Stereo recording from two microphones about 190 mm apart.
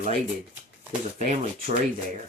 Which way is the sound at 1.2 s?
45° right (ahead or behind).